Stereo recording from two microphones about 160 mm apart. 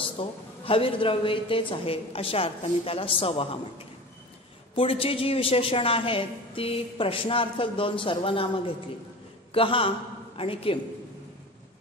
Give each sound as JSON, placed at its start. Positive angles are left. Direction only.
{"t": 0.0, "sound": "a woman's voice", "side_deg": 35}